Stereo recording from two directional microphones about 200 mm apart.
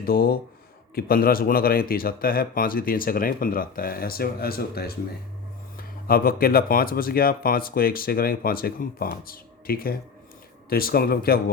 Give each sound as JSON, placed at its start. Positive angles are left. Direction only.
{"t": 0.0, "sound": "speech", "side_deg": 50}